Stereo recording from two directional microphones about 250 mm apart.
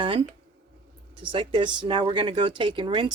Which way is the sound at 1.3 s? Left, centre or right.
Right.